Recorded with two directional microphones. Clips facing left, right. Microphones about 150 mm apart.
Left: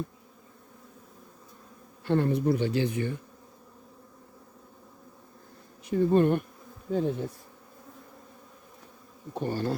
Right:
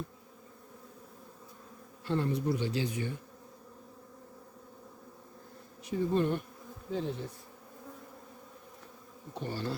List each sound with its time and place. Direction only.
2.0 s speech: 60° left (ahead or behind)
5.8 s bee: 55° left (ahead or behind)
9.3 s bee: 50° left (ahead or behind)